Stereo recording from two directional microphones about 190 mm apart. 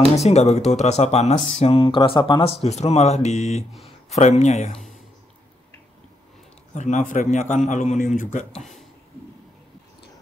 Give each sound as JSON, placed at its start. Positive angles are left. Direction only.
{"t": 0.2, "sound": "speech", "side_deg": 35}
{"t": 6.7, "sound": "speech", "side_deg": 40}
{"t": 8.5, "sound": "speech", "side_deg": 0}